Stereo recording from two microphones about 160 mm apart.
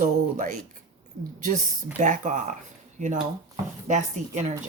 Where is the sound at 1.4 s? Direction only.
55° right (ahead or behind).